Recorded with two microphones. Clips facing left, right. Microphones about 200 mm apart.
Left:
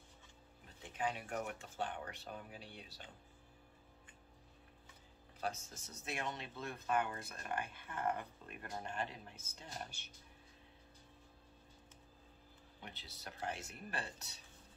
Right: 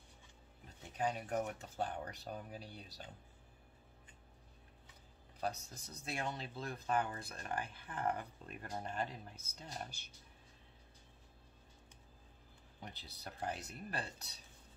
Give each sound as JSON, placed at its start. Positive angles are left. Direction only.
{"t": 0.9, "sound": "speech", "side_deg": -40}
{"t": 5.4, "sound": "speech", "side_deg": -35}
{"t": 12.8, "sound": "speech", "side_deg": -40}